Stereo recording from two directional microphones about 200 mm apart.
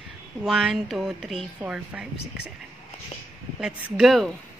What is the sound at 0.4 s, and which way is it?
A woman's voice, 5° right (ahead or behind).